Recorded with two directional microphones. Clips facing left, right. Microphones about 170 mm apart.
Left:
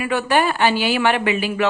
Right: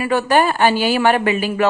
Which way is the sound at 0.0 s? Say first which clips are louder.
Right 3 dB; 40° right (ahead or behind).